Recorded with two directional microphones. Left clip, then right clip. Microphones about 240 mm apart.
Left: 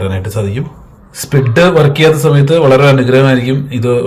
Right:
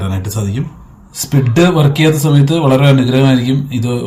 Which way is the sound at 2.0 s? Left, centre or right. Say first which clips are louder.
Left 4 dB; centre.